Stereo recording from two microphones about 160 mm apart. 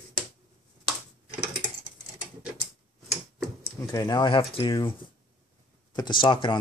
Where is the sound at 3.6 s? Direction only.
25° left (ahead or behind).